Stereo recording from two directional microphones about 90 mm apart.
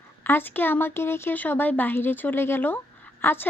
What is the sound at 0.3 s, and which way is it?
Speech, 25° left (ahead or behind).